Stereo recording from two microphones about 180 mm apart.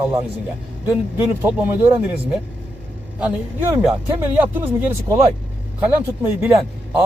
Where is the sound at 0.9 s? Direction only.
10° right (ahead or behind).